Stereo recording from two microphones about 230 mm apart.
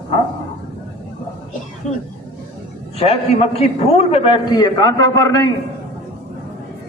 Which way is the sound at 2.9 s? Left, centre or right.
Left.